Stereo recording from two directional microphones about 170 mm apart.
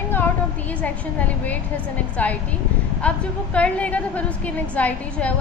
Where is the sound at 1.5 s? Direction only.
10° left (ahead or behind).